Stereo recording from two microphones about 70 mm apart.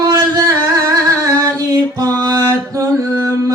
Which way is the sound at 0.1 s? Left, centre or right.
Right.